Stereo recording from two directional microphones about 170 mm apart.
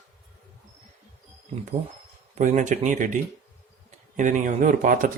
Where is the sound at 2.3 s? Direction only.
45° right (ahead or behind).